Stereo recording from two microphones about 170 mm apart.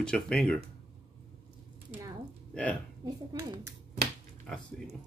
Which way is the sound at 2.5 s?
5° left (ahead or behind).